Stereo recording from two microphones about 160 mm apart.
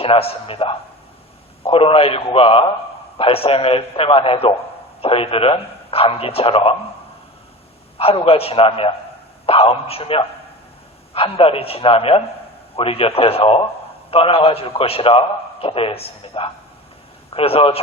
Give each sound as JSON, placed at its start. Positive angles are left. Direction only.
{"t": 0.0, "sound": "a man's voice", "side_deg": 35}
{"t": 7.9, "sound": "a man's voice", "side_deg": 35}